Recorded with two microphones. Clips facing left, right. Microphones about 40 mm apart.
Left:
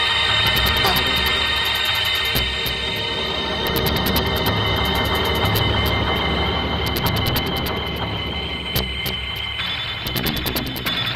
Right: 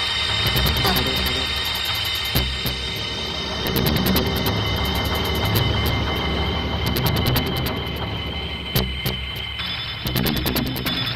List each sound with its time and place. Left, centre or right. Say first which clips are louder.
0.0 s music: left 4 dB; left
0.5 s music: left 3 dB; centre
3.6 s music: right 1 dB; centre
4.6 s music: left 4 dB; left
4.8 s music: left 4 dB; centre
5.9 s music: left 3 dB; left
6.9 s music: left 1 dB; centre
10.1 s music: right 2 dB; centre